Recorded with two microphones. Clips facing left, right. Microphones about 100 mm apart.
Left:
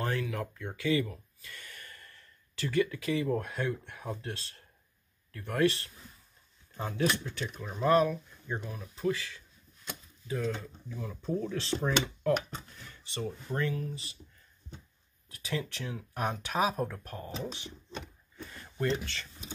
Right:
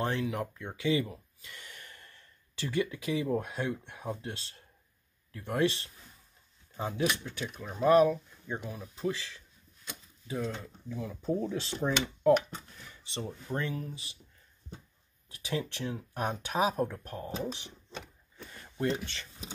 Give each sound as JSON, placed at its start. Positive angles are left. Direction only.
{"t": 0.0, "sound": "speech", "side_deg": -25}
{"t": 15.2, "sound": "speech", "side_deg": -20}
{"t": 18.8, "sound": "speech", "side_deg": -20}